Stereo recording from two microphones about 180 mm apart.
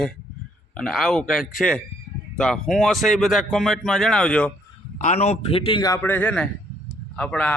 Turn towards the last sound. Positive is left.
turn(degrees=5)  # may be behind; listen again after turning